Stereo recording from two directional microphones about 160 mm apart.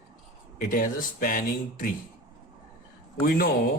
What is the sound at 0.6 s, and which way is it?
Speech, 60° left (ahead or behind).